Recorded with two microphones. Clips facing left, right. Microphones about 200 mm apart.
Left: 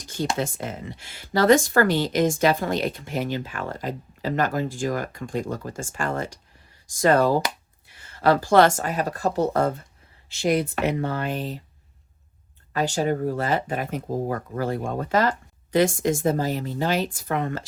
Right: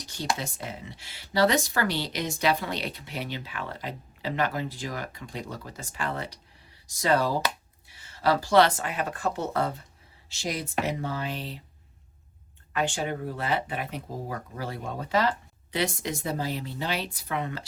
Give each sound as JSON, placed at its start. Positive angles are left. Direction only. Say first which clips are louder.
{"t": 0.0, "sound": "a sound", "louder": "left 8 dB", "side_deg": 50}
{"t": 0.3, "sound": "speech", "louder": "left 8 dB", "side_deg": 50}
{"t": 10.2, "sound": "speech", "louder": "left 10 dB", "side_deg": 55}
{"t": 12.7, "sound": "speech", "louder": "left 6 dB", "side_deg": 40}